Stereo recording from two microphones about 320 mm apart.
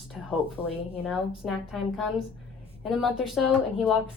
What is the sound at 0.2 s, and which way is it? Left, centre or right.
Speech, centre.